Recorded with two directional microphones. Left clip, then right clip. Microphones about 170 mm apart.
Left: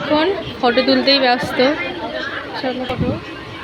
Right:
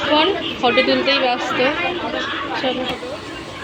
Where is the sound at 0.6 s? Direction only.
35° left (ahead or behind).